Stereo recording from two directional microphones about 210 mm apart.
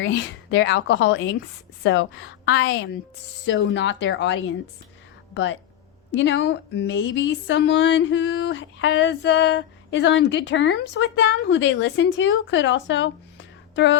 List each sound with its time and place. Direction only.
0.0 s speech: 55° left (ahead or behind)